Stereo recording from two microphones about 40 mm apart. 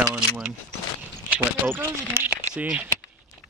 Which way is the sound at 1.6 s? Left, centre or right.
Right.